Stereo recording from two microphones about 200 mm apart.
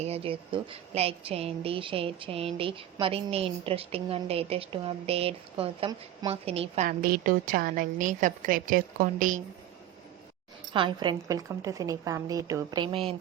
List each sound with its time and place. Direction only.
0.0 s a woman's voice: 30° right (ahead or behind)
6.8 s a woman's voice: 45° right (ahead or behind)
10.8 s a woman's voice: 25° right (ahead or behind)